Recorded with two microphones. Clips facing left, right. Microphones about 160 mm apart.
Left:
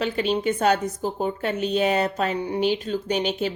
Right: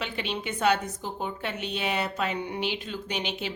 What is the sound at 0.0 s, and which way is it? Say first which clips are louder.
A woman's voice: left 9 dB; 40° left (ahead or behind).